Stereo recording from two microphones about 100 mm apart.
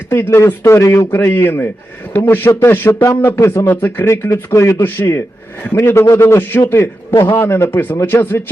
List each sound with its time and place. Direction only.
0.1 s a man's voice: 25° left (ahead or behind)
2.5 s a man's voice: 30° left (ahead or behind)